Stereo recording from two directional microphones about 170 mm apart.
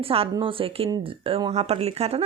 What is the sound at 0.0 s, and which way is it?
Speech, 35° right (ahead or behind).